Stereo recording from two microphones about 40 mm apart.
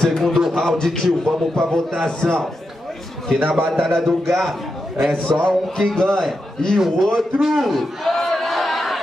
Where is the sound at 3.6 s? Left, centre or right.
Centre.